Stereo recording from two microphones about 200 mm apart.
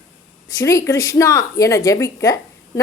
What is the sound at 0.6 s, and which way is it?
A woman's voice, 15° left (ahead or behind).